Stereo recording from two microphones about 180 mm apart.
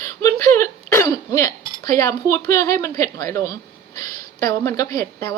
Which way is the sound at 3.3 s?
20° left (ahead or behind).